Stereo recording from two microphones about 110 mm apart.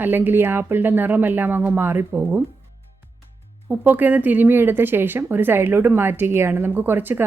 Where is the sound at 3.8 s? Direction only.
15° right (ahead or behind).